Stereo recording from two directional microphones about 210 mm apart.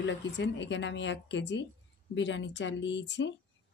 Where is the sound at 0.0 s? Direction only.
60° left (ahead or behind).